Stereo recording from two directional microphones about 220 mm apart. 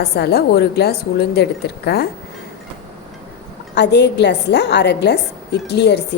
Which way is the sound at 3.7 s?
50° left (ahead or behind).